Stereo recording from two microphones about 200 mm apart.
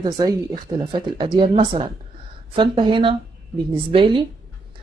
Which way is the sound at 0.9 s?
25° right (ahead or behind).